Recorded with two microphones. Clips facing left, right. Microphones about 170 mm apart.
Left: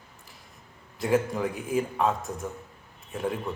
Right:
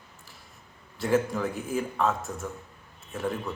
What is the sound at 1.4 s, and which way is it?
Speech, centre (ahead or behind).